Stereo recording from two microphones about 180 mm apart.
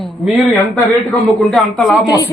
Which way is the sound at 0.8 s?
Centre (ahead or behind).